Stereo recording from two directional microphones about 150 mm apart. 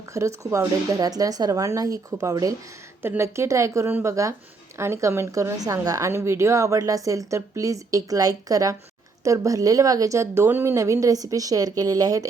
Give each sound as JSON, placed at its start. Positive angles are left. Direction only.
{"t": 0.1, "sound": "a woman's voice", "side_deg": -20}